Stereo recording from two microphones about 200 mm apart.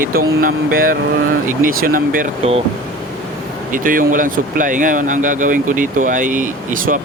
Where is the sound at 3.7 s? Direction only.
45° right (ahead or behind).